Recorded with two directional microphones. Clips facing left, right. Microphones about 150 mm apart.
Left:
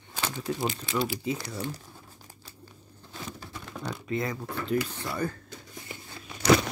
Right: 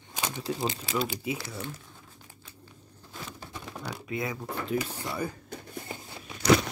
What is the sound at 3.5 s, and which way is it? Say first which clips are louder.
Speech: left 1 dB; 5° right (ahead or behind).